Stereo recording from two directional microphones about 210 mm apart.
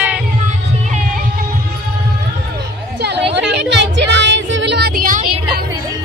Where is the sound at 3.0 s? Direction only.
50° right (ahead or behind).